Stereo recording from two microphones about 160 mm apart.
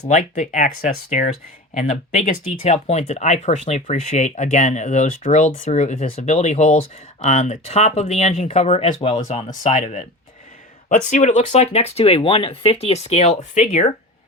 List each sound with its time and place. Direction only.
0.1 s speech: 50° left (ahead or behind)